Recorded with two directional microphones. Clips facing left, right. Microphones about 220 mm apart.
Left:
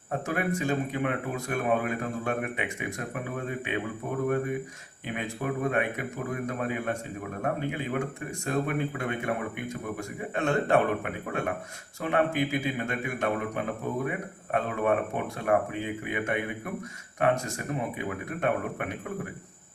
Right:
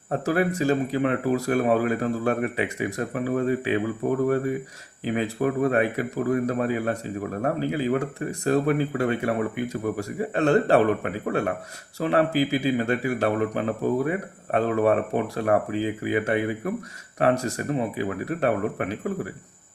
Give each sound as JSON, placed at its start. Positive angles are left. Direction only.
{"t": 0.1, "sound": "a man's voice", "side_deg": -35}
{"t": 5.0, "sound": "a man's voice", "side_deg": -35}